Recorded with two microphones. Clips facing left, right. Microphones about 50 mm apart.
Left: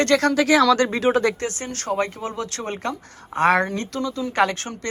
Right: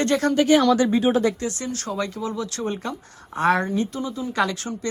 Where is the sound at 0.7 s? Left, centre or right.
Left.